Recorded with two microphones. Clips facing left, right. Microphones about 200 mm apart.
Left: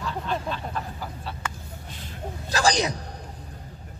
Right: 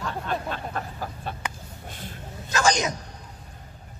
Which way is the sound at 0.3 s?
50° right (ahead or behind).